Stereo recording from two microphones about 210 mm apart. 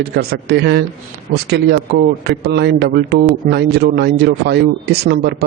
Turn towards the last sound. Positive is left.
turn(degrees=-50)  # may be behind; listen again after turning